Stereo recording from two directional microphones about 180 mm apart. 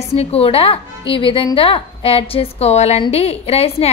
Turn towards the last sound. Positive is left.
turn(degrees=35)  # may be behind; listen again after turning